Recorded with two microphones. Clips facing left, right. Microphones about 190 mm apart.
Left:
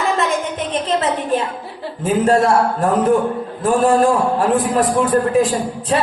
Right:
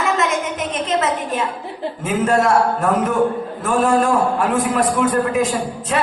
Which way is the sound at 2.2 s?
35° left (ahead or behind).